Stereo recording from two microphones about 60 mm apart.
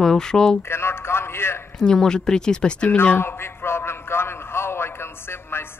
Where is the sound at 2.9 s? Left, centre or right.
Left.